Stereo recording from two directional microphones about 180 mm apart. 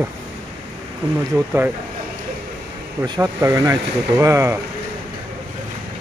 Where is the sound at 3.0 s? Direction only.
15° right (ahead or behind).